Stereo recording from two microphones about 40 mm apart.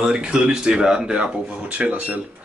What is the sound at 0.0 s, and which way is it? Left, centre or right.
Speech, right.